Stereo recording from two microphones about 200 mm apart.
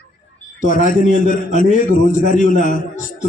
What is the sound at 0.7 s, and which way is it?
A man's voice, 40° left (ahead or behind).